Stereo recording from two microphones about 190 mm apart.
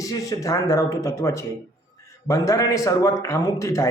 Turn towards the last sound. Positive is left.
turn(degrees=15)  # may be behind; listen again after turning